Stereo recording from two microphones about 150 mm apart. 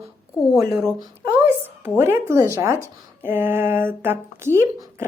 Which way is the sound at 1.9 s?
15° right (ahead or behind).